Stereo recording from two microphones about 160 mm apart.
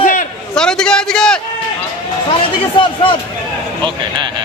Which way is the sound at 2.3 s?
35° left (ahead or behind).